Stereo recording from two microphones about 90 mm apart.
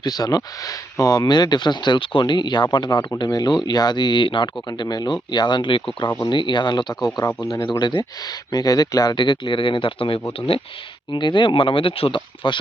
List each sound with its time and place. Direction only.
0.0 s speech: 45° left (ahead or behind)
7.7 s speech: 55° left (ahead or behind); by 10.2 s 80° left
11.1 s speech: 60° left (ahead or behind)